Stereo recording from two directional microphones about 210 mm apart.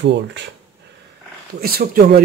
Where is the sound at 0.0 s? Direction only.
55° right (ahead or behind).